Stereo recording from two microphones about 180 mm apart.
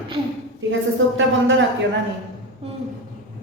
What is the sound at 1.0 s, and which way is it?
Speech, 90° right.